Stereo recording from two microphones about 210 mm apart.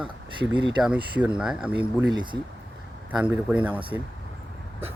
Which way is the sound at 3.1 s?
5° right (ahead or behind).